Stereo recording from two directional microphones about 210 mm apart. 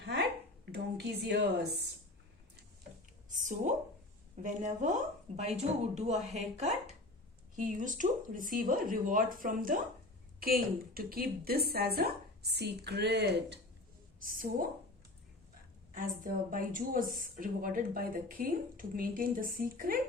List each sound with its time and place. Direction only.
0.6 s a woman's voice: 50° right (ahead or behind)
3.3 s a woman's voice: 35° right (ahead or behind); by 13.6 s 55° right (ahead or behind)
14.2 s speech: 40° right (ahead or behind)
15.9 s a woman's voice: 40° right (ahead or behind)